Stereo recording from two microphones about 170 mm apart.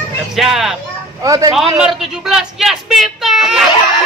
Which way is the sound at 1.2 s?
20° right (ahead or behind).